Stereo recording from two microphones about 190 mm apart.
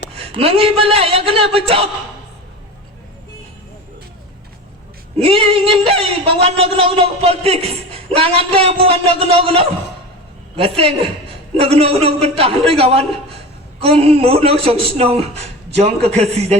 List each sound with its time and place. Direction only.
0.2 s speech: 30° right (ahead or behind)
5.1 s speech: 30° right (ahead or behind)